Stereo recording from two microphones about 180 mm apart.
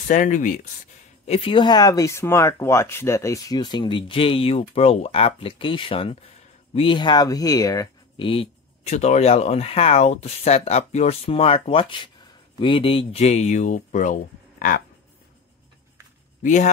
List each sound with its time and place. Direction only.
0.1 s speech: 45° left (ahead or behind)
1.2 s speech: 35° left (ahead or behind)
16.4 s speech: 40° left (ahead or behind)